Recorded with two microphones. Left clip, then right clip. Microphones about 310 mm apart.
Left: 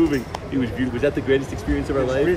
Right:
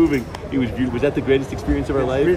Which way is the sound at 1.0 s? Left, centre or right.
Centre.